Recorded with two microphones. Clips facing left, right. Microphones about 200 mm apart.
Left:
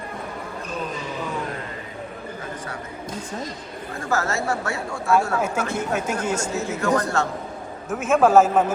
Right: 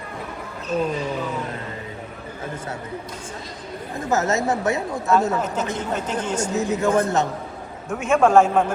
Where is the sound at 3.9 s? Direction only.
20° right (ahead or behind).